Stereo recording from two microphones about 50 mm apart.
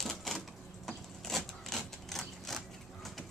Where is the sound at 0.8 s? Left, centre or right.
Centre.